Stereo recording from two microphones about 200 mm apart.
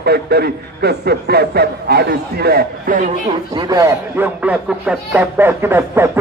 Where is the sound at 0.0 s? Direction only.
55° right (ahead or behind).